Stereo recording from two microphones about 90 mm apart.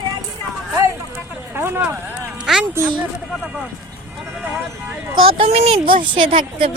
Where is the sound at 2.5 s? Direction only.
5° right (ahead or behind).